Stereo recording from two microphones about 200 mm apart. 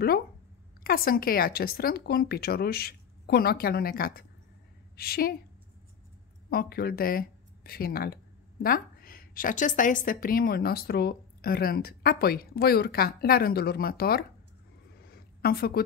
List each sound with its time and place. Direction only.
0.8 s a woman's voice: 50° left (ahead or behind)
6.5 s a woman's voice: 50° left (ahead or behind)
15.0 s a sound: 50° left (ahead or behind)